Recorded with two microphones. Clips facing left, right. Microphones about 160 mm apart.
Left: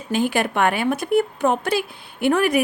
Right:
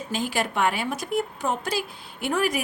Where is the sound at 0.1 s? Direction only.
60° left (ahead or behind).